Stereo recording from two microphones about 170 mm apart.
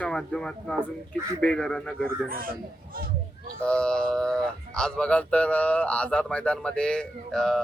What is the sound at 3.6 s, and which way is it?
Speech, 5° left (ahead or behind).